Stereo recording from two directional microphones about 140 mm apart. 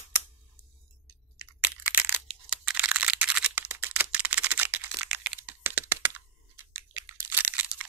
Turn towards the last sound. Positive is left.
turn(degrees=-10)  # may be behind; listen again after turning